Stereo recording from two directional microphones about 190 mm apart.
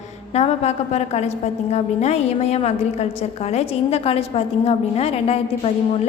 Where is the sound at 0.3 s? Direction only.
35° left (ahead or behind).